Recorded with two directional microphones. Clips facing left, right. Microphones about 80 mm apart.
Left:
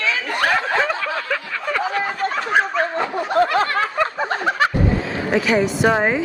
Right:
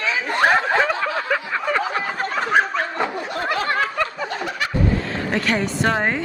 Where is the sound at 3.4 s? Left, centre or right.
Left.